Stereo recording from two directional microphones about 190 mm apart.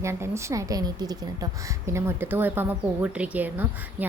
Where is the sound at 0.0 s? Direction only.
15° right (ahead or behind).